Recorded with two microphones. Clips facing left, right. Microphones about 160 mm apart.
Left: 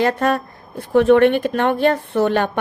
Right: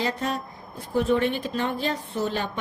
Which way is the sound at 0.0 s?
60° left (ahead or behind).